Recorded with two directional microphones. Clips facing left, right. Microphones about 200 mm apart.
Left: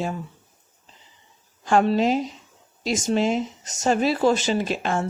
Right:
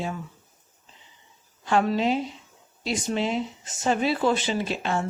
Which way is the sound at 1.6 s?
45° left (ahead or behind).